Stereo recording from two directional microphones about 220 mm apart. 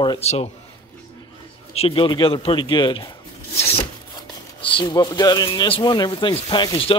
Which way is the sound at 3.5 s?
25° left (ahead or behind).